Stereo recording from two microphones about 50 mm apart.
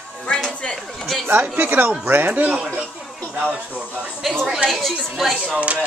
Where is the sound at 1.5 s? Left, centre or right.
Right.